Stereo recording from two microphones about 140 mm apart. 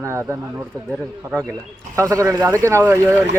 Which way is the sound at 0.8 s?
5° left (ahead or behind).